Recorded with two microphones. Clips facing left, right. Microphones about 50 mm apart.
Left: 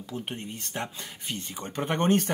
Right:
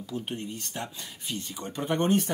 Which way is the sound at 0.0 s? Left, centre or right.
Left.